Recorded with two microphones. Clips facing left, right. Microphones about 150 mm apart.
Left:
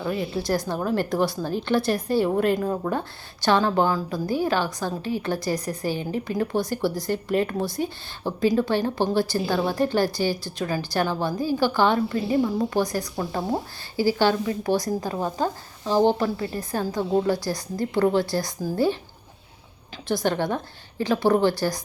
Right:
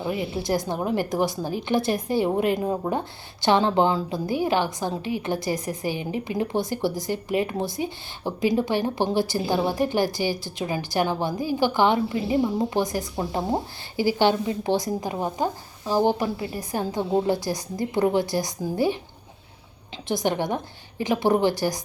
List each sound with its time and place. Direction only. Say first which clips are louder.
0.0 s a woman's voice: left 1 dB; 20° right (ahead or behind)
20.1 s a woman's voice: left 1 dB; 20° right (ahead or behind)